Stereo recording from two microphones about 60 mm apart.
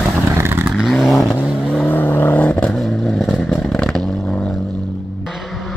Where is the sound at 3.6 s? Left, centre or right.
Centre.